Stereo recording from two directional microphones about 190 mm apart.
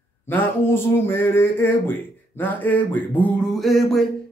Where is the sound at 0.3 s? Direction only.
10° left (ahead or behind).